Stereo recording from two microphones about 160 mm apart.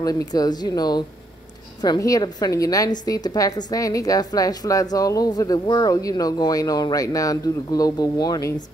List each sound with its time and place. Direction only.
0.0 s a woman's voice: 25° left (ahead or behind)